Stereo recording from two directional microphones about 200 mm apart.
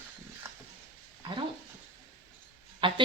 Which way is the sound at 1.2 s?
25° right (ahead or behind).